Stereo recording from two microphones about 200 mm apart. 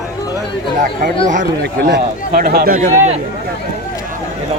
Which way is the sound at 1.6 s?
50° right (ahead or behind).